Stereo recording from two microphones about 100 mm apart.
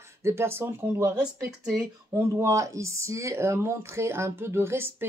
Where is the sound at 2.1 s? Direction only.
30° right (ahead or behind).